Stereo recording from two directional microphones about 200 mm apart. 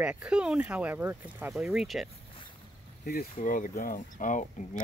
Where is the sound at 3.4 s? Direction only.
45° left (ahead or behind).